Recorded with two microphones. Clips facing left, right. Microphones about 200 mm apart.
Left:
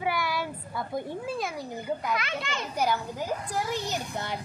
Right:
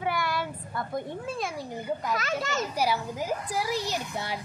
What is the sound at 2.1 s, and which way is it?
Speech, 40° right (ahead or behind).